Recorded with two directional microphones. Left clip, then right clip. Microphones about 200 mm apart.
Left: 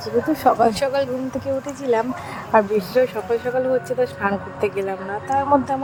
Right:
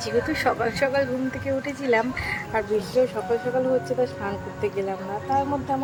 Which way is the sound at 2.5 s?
20° left (ahead or behind).